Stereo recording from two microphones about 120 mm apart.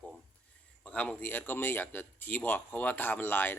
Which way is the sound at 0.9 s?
10° left (ahead or behind).